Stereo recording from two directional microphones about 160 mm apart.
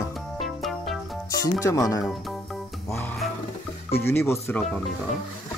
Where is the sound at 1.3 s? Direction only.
20° left (ahead or behind).